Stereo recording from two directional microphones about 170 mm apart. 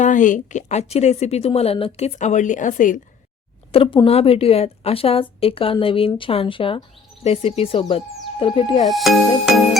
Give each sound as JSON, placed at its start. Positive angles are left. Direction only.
{"t": 0.0, "sound": "a woman's voice", "side_deg": 50}
{"t": 3.7, "sound": "a woman's voice", "side_deg": 35}
{"t": 8.8, "sound": "speech", "side_deg": 0}